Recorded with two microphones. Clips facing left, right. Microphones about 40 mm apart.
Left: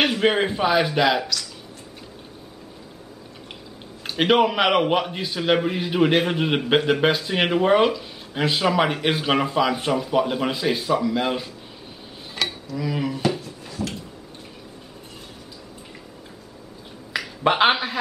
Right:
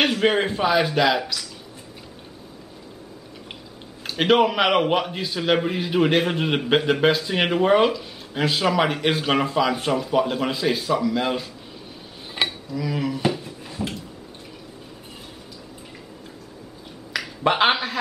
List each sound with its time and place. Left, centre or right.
0.0 s a man's voice: centre
4.1 s a man's voice: centre
12.4 s a sound: right
12.7 s a man's voice: centre
13.4 s a sound: centre
17.2 s finger snapping: centre